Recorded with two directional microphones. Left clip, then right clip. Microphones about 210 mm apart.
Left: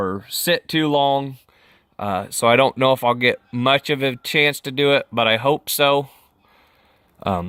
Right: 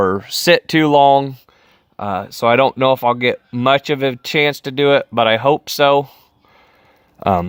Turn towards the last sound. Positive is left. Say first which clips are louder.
# right 7 dB
turn(degrees=-20)  # may be behind; listen again after turning